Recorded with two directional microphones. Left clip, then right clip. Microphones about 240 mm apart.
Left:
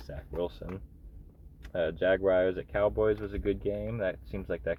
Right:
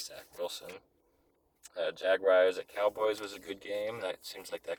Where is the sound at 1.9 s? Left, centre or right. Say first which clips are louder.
Even; centre.